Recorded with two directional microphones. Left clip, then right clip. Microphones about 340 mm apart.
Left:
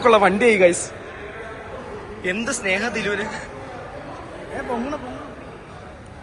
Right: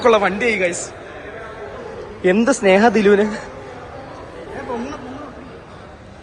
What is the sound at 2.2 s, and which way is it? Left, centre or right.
A man's voice, right.